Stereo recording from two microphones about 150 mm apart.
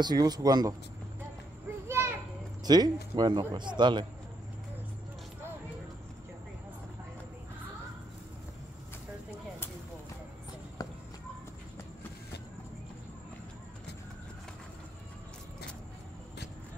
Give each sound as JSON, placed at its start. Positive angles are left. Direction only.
{"t": 0.0, "sound": "speech", "side_deg": -25}
{"t": 1.9, "sound": "children playing", "side_deg": -15}
{"t": 2.6, "sound": "speech", "side_deg": -25}
{"t": 10.8, "sound": "clip-clop", "side_deg": 25}